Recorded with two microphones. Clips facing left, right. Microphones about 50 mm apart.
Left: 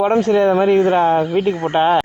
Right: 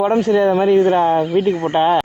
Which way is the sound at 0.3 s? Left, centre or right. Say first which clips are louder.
Right 1 dB; left.